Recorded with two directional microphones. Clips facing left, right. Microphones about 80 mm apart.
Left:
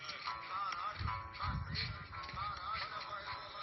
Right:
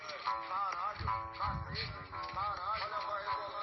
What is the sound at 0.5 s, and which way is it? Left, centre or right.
Music, centre.